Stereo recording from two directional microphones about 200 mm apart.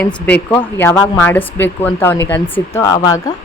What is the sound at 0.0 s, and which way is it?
A woman's voice, 5° left (ahead or behind).